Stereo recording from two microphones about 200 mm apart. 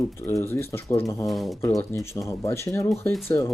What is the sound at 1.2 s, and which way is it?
Speech, centre (ahead or behind).